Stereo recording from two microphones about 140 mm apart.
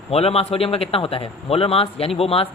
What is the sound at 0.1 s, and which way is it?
A man's voice, 45° left (ahead or behind).